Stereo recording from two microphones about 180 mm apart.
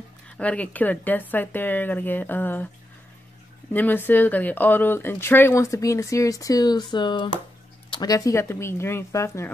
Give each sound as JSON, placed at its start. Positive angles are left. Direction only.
{"t": 0.4, "sound": "speech", "side_deg": 10}
{"t": 3.7, "sound": "speech", "side_deg": 10}